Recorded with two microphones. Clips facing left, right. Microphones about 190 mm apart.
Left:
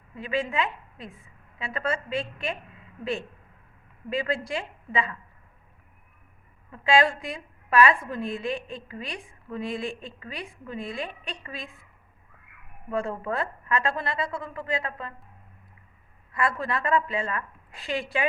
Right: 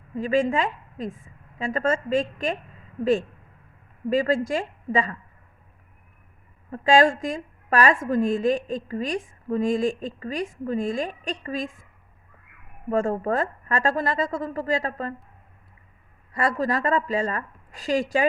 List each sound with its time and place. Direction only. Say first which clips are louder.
0.2 s a woman's voice: right 6 dB; 45° right (ahead or behind)
6.7 s a woman's voice: right 4 dB; 40° right (ahead or behind)
12.9 s a woman's voice: right 6 dB; 45° right (ahead or behind)
16.3 s a woman's voice: right 4 dB; 40° right (ahead or behind)